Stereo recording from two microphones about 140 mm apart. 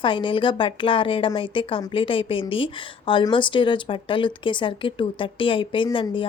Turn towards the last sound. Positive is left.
turn(degrees=35)  # may be behind; listen again after turning